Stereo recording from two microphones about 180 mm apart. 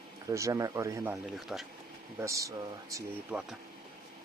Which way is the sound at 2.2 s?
15° right (ahead or behind).